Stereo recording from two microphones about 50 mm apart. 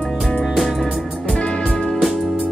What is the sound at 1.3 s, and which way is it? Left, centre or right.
Music, left.